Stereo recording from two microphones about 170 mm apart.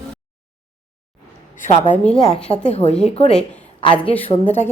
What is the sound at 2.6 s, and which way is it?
Speech, 40° left (ahead or behind).